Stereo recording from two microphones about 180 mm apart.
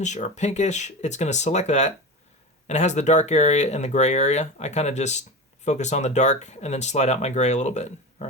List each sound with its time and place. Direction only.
0.0 s speech: 40° left (ahead or behind)